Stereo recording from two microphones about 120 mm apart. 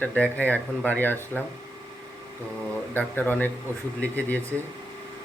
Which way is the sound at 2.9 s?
15° left (ahead or behind).